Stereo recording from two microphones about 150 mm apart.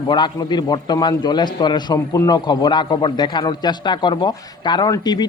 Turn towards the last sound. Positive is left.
turn(degrees=25)  # may be behind; listen again after turning